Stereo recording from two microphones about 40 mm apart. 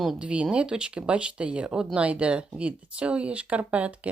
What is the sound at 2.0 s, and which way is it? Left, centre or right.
Speech, right.